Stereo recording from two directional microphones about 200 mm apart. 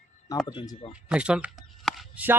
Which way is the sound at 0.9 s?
5° right (ahead or behind).